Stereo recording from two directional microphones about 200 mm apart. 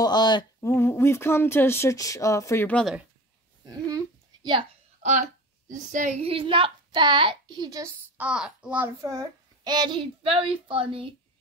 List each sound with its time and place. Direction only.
0.0 s speech: 20° left (ahead or behind); by 3.0 s 5° left (ahead or behind)
3.9 s a sound: 20° right (ahead or behind)
5.7 s a child's voice: 40° right (ahead or behind); by 7.9 s 20° right (ahead or behind)
8.2 s a child's voice: 5° right (ahead or behind); by 11.1 s 25° right (ahead or behind)